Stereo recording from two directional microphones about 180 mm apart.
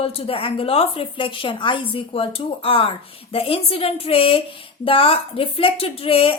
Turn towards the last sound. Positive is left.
turn(degrees=30)  # may be behind; listen again after turning